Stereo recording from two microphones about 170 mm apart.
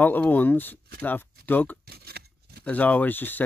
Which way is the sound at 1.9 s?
65° right (ahead or behind).